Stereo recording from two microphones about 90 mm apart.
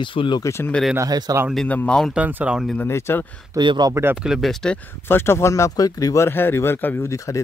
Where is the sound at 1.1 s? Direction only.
45° right (ahead or behind).